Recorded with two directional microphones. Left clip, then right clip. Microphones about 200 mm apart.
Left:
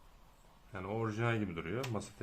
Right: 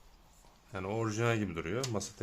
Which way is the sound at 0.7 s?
55° right (ahead or behind).